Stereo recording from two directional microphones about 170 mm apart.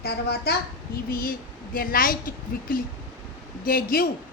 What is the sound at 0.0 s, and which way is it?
A child's voice, 70° left (ahead or behind).